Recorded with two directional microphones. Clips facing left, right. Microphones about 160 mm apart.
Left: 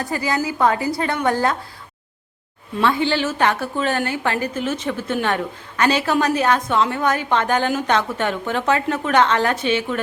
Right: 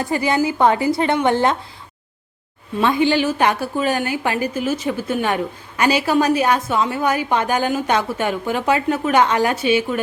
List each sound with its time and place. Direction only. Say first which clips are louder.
0.0 s a woman's voice: right 4 dB; 25° right (ahead or behind)
2.8 s a woman's voice: right 3 dB; 15° right (ahead or behind)